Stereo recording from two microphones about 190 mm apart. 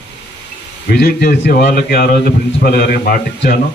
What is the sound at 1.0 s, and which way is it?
A man's voice, 55° left (ahead or behind).